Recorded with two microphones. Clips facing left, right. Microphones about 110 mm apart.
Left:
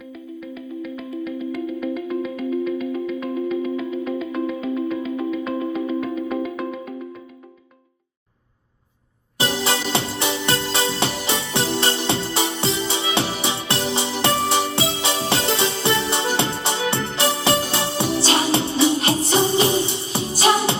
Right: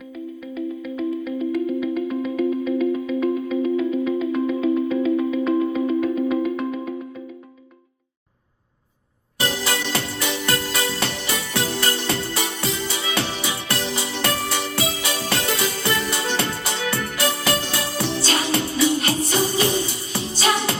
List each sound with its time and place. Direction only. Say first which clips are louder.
0.1 s music: right 2 dB; centre (ahead or behind)
9.4 s music: left 2 dB; 25° left (ahead or behind)